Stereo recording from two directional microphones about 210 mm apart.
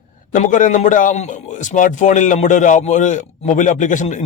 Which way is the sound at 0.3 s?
40° left (ahead or behind).